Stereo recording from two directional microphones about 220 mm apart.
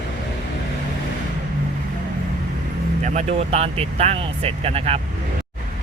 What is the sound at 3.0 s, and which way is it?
Speech, 30° right (ahead or behind).